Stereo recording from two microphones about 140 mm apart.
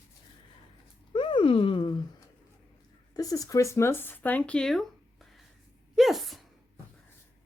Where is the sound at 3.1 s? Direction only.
25° left (ahead or behind); by 6.4 s centre (ahead or behind).